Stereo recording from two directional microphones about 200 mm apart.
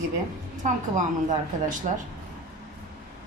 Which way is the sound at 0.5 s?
40° right (ahead or behind).